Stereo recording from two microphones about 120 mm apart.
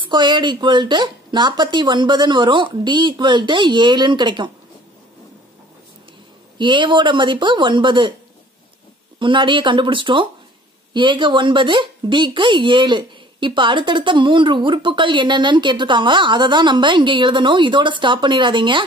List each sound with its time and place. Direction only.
0.1 s a woman's voice: 40° right (ahead or behind)
6.6 s a woman's voice: 40° right (ahead or behind)
9.2 s a woman's voice: 40° right (ahead or behind)